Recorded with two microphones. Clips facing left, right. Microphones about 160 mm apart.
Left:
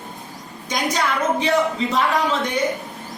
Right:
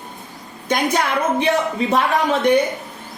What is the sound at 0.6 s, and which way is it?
Speech, 60° right (ahead or behind).